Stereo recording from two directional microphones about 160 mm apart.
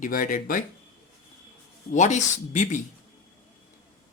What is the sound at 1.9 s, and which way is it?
Speech, 45° left (ahead or behind).